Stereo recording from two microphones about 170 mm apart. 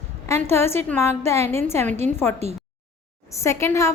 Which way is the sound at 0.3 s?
15° left (ahead or behind).